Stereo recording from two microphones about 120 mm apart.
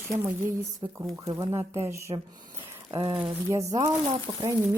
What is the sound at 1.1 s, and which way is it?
Speech, 25° right (ahead or behind).